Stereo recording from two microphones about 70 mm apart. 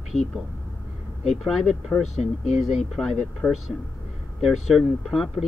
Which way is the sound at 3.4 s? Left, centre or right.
Centre.